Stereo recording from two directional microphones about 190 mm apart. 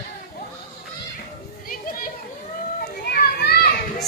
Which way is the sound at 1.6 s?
50° left (ahead or behind).